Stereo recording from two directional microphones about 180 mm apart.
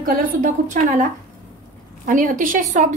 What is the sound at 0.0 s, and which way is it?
A woman's voice, 50° right (ahead or behind).